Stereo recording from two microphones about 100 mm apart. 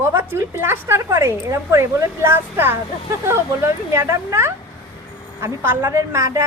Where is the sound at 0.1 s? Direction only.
25° right (ahead or behind).